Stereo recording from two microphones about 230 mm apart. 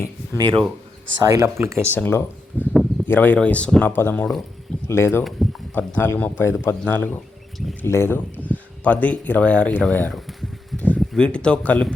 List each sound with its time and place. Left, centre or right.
0.3 s speech: centre
1.9 s speech: centre